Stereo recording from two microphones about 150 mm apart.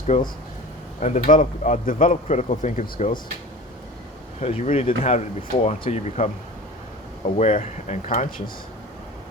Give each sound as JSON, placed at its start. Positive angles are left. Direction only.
{"t": 0.1, "sound": "speech", "side_deg": 50}
{"t": 4.4, "sound": "speech", "side_deg": 45}